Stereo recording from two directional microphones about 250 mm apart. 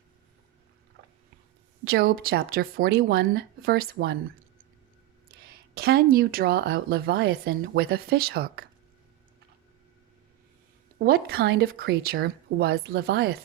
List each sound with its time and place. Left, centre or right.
1.8 s speech: right
5.5 s speech: right
11.0 s speech: right